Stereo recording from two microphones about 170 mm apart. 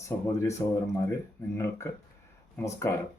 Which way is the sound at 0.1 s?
10° left (ahead or behind).